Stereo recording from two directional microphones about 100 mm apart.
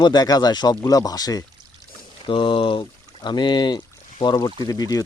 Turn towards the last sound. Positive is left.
turn(degrees=40)  # may be behind; listen again after turning